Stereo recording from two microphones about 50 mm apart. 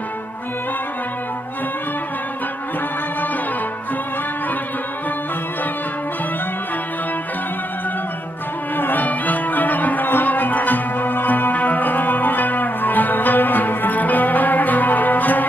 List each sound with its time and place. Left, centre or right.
8.7 s music: left